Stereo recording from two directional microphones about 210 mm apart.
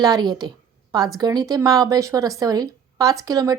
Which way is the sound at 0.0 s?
20° right (ahead or behind).